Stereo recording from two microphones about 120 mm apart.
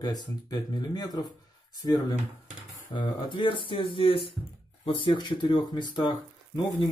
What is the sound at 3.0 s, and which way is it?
Speech, 40° left (ahead or behind).